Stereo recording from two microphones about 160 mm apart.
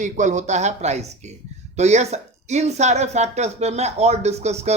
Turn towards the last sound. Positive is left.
turn(degrees=-40)  # may be behind; listen again after turning